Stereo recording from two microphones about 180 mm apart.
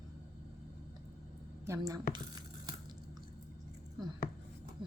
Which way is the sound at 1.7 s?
20° right (ahead or behind).